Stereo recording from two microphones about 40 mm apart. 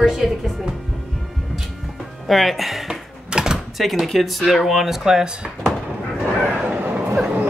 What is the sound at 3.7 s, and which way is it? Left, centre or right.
Speech, centre.